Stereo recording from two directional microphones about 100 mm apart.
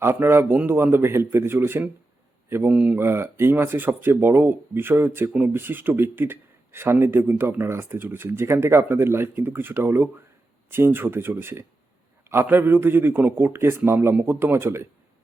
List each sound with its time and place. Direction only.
0.0 s speech: 25° right (ahead or behind)